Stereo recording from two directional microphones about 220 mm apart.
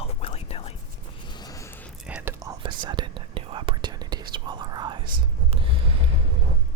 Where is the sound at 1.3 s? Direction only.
20° left (ahead or behind).